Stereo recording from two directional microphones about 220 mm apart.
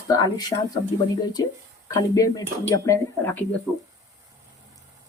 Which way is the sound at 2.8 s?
15° left (ahead or behind).